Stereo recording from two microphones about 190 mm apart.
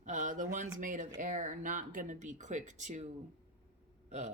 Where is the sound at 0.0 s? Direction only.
40° right (ahead or behind).